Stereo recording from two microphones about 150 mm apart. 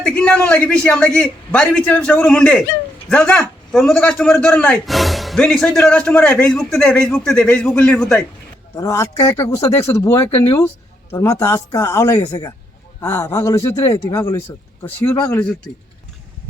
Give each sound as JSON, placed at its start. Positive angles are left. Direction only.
{"t": 0.0, "sound": "a man's voice", "side_deg": 5}
{"t": 8.7, "sound": "speech", "side_deg": 20}
{"t": 13.0, "sound": "speech", "side_deg": 15}